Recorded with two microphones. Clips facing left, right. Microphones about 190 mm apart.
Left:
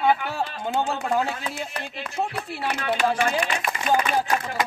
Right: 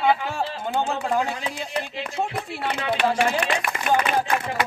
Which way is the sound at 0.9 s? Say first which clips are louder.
Even; 5° left (ahead or behind).